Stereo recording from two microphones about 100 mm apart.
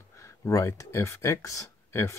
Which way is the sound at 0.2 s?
30° left (ahead or behind).